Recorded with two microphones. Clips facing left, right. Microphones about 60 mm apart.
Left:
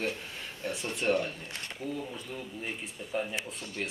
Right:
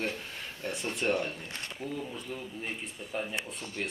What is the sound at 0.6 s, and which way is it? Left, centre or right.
Speech, centre.